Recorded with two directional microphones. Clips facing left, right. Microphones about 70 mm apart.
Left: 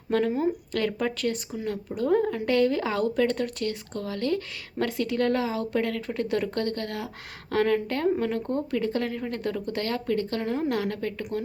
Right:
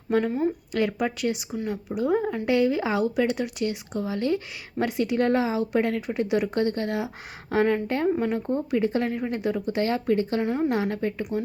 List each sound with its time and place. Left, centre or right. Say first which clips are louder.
0.3 s speech: even; centre
0.7 s speech: right 2 dB; centre
10.4 s speech: right 3 dB; centre
10.7 s speech: right 2 dB; centre
11.2 s speech: right 3 dB; centre